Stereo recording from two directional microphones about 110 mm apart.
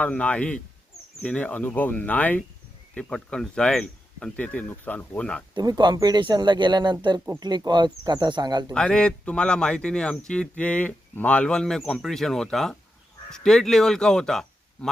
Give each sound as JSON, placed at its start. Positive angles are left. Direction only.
{"t": 0.0, "sound": "speech", "side_deg": 10}
{"t": 5.5, "sound": "speech", "side_deg": -40}
{"t": 8.7, "sound": "speech", "side_deg": 5}